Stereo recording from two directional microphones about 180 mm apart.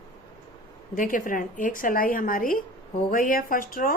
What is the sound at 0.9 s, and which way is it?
Speech, 50° left (ahead or behind).